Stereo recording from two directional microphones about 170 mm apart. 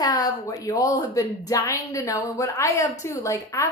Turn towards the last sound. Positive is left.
turn(degrees=20)  # may be behind; listen again after turning